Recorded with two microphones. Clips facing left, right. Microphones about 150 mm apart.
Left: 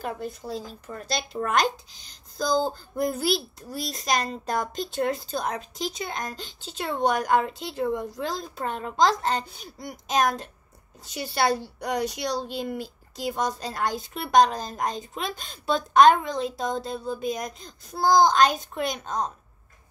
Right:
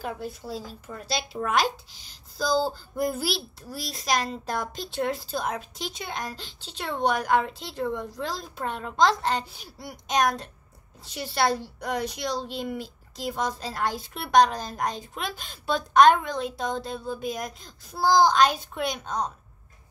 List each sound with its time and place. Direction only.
0.0 s a woman's voice: 5° right (ahead or behind)